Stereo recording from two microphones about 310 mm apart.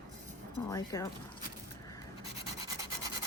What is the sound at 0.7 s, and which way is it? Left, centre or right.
Speech, centre.